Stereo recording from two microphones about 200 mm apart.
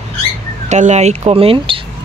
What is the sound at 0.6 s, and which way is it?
Speech, 35° right (ahead or behind).